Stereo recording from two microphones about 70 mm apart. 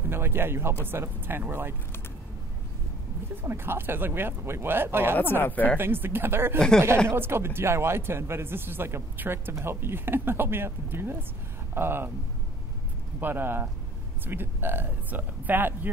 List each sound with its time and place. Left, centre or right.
0.1 s a man's voice: right
3.4 s a man's voice: right
5.1 s speech: left
5.8 s a man's voice: right
13.2 s a man's voice: right